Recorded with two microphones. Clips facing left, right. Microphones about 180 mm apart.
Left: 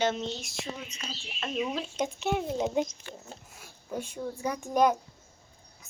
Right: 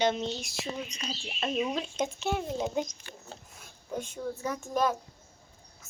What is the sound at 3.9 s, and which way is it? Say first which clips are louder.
Speech: even; 10° left (ahead or behind).